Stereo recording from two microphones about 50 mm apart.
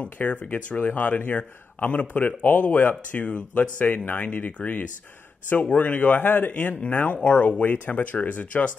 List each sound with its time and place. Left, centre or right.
0.0 s speech: left
6.1 s speech: left
6.5 s speech: left